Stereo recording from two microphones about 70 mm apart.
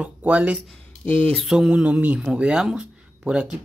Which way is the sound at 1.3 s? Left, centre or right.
Centre.